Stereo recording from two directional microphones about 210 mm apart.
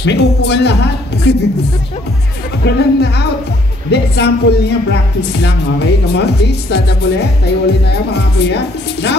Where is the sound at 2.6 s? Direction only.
50° left (ahead or behind).